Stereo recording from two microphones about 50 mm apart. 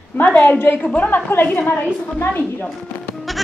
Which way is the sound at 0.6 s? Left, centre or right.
Left.